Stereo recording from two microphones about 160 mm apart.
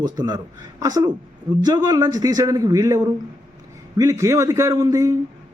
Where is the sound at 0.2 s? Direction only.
25° right (ahead or behind).